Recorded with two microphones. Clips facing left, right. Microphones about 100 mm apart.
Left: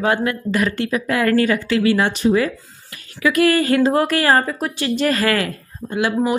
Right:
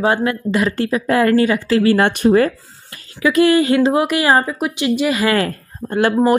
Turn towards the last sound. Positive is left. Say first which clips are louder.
# right 5 dB
turn(degrees=-50)  # may be behind; listen again after turning